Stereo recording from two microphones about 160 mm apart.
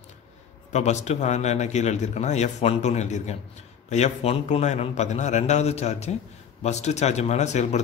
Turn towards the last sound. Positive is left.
turn(degrees=45)  # may be behind; listen again after turning